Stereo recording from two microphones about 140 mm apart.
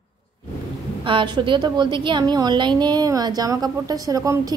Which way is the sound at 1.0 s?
35° right (ahead or behind).